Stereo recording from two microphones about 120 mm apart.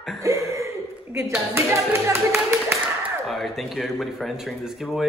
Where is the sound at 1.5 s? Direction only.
25° right (ahead or behind).